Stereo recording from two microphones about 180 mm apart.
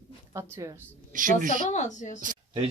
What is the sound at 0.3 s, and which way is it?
Speech, 15° right (ahead or behind).